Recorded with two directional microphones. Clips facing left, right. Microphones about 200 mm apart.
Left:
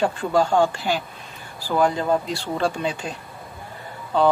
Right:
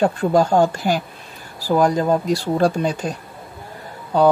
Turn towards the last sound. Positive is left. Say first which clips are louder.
# right 4 dB
turn(degrees=-40)  # may be behind; listen again after turning